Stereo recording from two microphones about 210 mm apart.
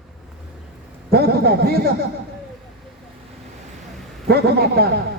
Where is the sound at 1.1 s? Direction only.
50° right (ahead or behind).